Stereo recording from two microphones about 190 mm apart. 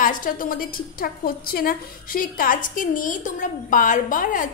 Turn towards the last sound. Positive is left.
turn(degrees=45)  # may be behind; listen again after turning